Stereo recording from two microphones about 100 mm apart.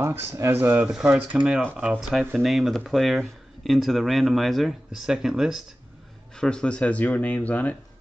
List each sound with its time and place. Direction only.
0.0 s speech: 25° right (ahead or behind); by 5.6 s 5° right (ahead or behind)
6.3 s speech: 5° left (ahead or behind)